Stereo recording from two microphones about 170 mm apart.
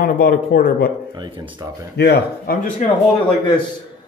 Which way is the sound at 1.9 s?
70° left (ahead or behind).